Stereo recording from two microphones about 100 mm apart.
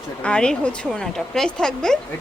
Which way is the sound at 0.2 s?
10° left (ahead or behind).